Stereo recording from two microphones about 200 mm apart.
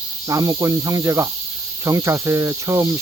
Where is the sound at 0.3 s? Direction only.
15° right (ahead or behind).